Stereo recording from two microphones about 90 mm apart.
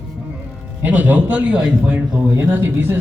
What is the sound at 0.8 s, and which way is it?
A man's voice, 20° right (ahead or behind).